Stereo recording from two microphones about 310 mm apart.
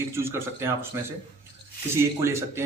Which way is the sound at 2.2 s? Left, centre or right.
Centre.